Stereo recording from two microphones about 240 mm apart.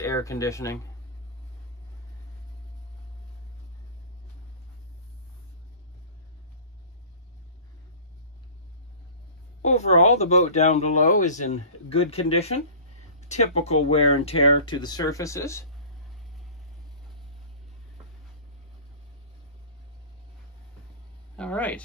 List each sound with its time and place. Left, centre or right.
0.0 s speech: centre
9.6 s speech: left; by 15.6 s centre
21.4 s speech: centre